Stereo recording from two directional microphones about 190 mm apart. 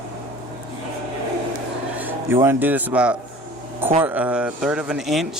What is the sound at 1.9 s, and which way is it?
Speech, 10° right (ahead or behind).